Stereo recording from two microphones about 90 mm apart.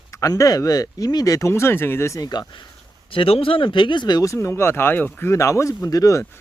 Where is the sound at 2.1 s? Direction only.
45° left (ahead or behind).